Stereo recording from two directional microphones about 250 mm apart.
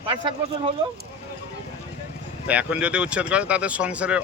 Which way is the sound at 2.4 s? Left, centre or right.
Centre.